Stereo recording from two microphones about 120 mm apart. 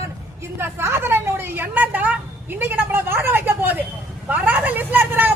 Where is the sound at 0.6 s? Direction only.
20° right (ahead or behind).